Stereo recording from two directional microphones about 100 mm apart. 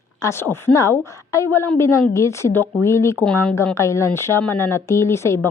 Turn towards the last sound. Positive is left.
turn(degrees=25)  # may be behind; listen again after turning